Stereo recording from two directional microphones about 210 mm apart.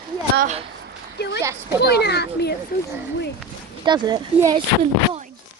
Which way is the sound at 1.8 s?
50° left (ahead or behind).